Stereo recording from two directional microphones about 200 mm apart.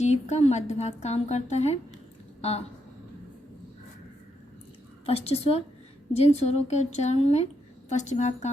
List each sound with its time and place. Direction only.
0.0 s a woman's voice: 35° left (ahead or behind)
5.0 s a woman's voice: 30° left (ahead or behind)